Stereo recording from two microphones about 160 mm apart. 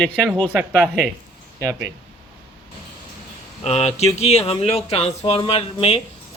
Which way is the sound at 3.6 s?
40° left (ahead or behind).